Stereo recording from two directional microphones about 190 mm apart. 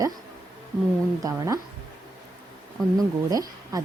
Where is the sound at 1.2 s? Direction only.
20° right (ahead or behind).